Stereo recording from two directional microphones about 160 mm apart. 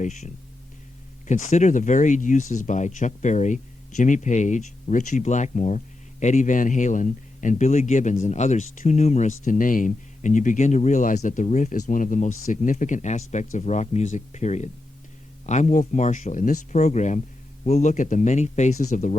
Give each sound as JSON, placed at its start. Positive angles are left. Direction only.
{"t": 0.0, "sound": "speech", "side_deg": 45}
{"t": 1.3, "sound": "speech", "side_deg": 50}